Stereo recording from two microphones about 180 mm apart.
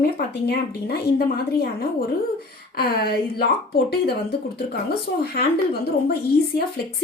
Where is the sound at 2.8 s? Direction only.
60° left (ahead or behind).